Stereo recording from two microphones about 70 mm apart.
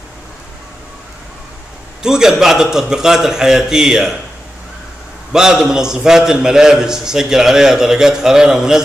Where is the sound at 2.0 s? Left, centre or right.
Centre.